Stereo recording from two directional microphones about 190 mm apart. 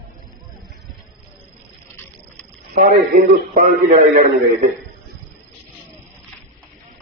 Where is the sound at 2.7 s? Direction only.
50° right (ahead or behind).